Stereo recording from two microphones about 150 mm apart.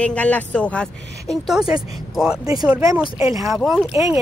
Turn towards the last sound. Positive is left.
turn(degrees=0)  # may be behind; listen again after turning